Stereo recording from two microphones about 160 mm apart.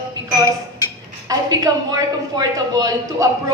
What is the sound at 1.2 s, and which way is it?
A woman's voice, 20° right (ahead or behind).